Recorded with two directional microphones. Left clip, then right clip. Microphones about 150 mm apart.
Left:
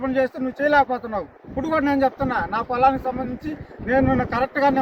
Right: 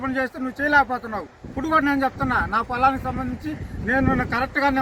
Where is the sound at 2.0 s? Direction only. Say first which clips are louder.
Left 1 dB; centre (ahead or behind).